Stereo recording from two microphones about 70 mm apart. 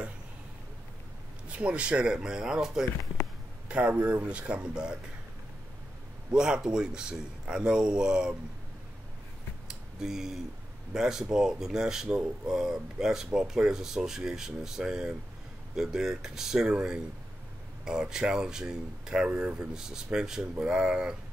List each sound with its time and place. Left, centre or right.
1.5 s speech: centre
6.3 s speech: centre
9.7 s a sound: centre
10.9 s speech: centre
18.1 s speech: centre